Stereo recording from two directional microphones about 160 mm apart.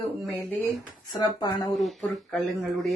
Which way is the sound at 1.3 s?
25° left (ahead or behind).